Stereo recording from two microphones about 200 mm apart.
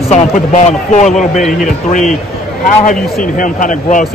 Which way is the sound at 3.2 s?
40° left (ahead or behind).